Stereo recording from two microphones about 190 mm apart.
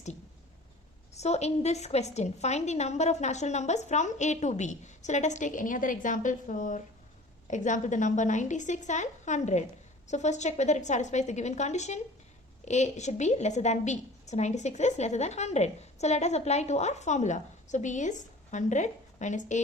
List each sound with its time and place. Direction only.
1.1 s a woman's voice: 35° left (ahead or behind)